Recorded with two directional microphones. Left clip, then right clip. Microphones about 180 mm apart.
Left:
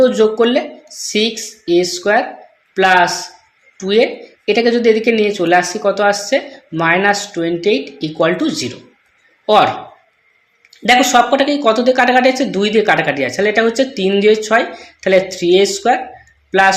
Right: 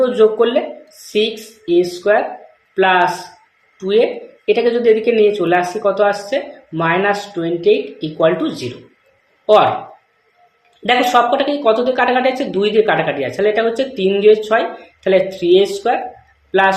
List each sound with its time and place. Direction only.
0.0 s speech: 60° left (ahead or behind)
10.8 s speech: 60° left (ahead or behind)